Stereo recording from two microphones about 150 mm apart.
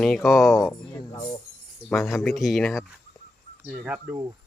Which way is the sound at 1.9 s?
Centre (ahead or behind).